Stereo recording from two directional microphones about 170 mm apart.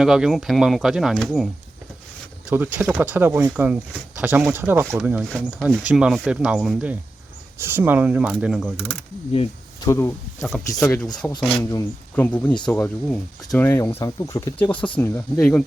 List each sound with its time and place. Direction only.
0.0 s speech: centre (ahead or behind)
2.5 s speech: 10° right (ahead or behind)
9.8 s speech: 15° left (ahead or behind)
14.9 s speech: 10° left (ahead or behind)